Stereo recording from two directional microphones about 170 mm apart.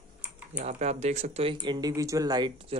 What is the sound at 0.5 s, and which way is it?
Speech, 40° right (ahead or behind).